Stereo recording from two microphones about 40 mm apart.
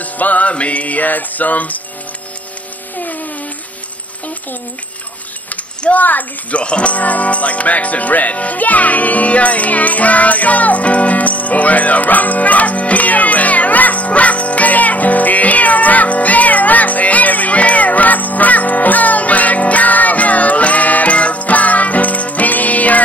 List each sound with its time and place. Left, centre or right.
0.0 s music: left
3.0 s a sound: left
5.5 s a child's voice: left
6.6 s music: left